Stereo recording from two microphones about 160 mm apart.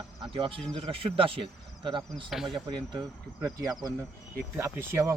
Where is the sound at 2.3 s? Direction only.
Centre (ahead or behind).